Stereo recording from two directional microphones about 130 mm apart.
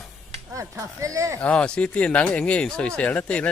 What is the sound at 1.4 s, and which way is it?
Speech, 10° left (ahead or behind).